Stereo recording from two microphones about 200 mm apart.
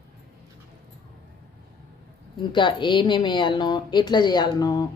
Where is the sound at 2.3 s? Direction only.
25° left (ahead or behind).